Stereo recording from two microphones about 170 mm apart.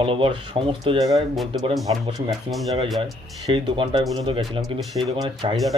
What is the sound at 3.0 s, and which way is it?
Speech, 30° right (ahead or behind).